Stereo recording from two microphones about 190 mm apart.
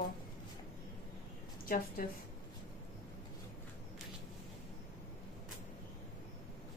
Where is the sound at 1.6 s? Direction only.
50° left (ahead or behind).